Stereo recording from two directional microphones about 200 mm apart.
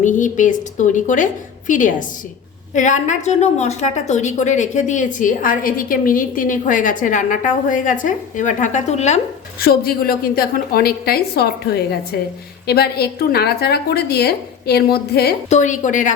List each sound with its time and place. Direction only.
0.0 s a woman's voice: 40° left (ahead or behind)
9.6 s a woman's voice: 50° left (ahead or behind)
15.4 s a woman's voice: 35° left (ahead or behind)